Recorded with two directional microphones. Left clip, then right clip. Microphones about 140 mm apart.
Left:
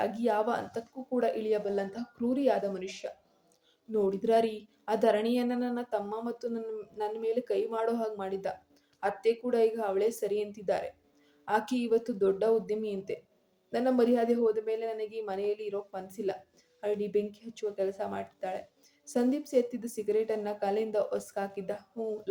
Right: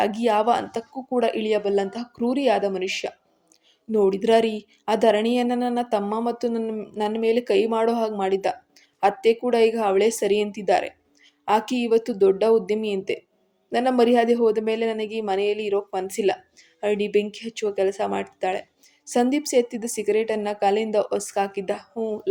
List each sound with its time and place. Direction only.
0.0 s speech: 35° right (ahead or behind)